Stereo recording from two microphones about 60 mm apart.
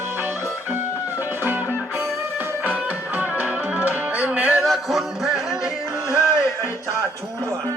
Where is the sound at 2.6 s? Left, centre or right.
Right.